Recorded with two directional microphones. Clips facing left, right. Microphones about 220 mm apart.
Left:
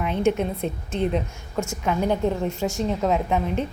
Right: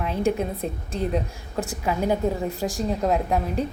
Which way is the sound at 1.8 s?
5° right (ahead or behind).